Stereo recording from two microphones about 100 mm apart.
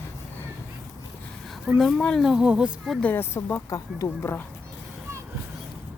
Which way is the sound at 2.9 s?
20° left (ahead or behind).